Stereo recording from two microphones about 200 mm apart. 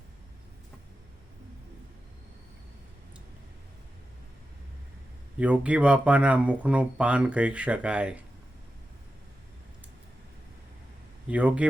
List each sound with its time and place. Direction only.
5.4 s speech: 5° right (ahead or behind)
11.3 s a man's voice: 5° right (ahead or behind)